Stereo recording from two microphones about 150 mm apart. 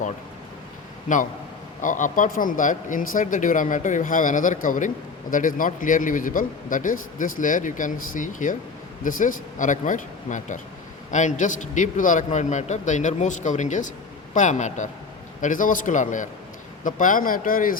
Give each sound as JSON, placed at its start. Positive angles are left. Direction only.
{"t": 1.0, "sound": "a man's voice", "side_deg": 60}